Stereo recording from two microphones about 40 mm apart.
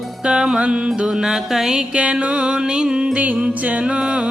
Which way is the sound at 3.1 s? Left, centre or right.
Right.